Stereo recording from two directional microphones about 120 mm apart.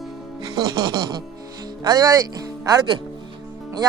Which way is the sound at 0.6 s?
30° right (ahead or behind).